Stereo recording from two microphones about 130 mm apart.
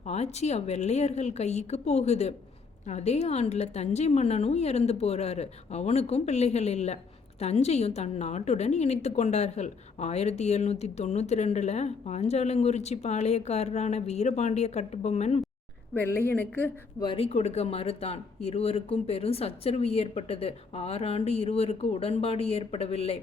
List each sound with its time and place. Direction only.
0.0 s a woman's voice: 55° left (ahead or behind)
16.0 s a woman's voice: 15° left (ahead or behind)
17.2 s speech: 55° left (ahead or behind)